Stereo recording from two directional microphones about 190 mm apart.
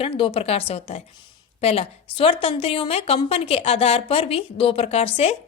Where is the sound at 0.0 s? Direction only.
30° left (ahead or behind).